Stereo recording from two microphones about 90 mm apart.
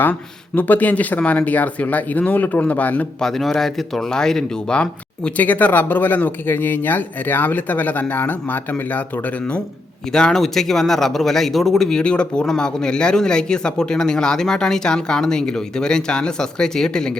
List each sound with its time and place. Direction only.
0.0 s a man's voice: 20° left (ahead or behind)
3.2 s a man's voice: 5° left (ahead or behind)
10.1 s a man's voice: 5° left (ahead or behind)